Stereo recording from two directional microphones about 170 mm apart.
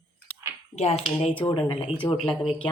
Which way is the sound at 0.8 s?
40° left (ahead or behind).